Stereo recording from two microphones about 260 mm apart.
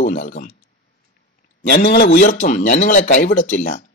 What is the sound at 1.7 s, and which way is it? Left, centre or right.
Speech, left.